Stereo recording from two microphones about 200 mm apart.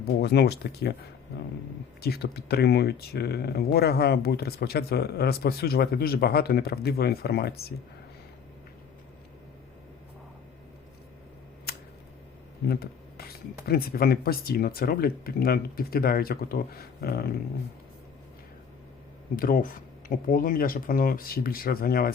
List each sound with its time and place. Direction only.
0.0 s speech: 55° left (ahead or behind)
2.0 s speech: 50° left (ahead or behind)
12.6 s speech: 50° left (ahead or behind)
19.4 s speech: 45° left (ahead or behind)